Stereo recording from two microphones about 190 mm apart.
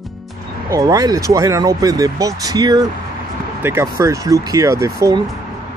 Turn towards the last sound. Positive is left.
turn(degrees=-15)  # may be behind; listen again after turning